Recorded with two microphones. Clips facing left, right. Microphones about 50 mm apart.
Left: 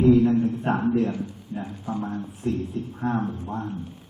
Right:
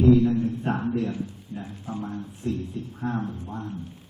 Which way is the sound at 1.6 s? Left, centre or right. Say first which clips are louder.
Left 4 dB; centre.